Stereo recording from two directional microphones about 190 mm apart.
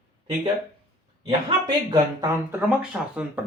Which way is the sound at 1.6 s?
20° right (ahead or behind).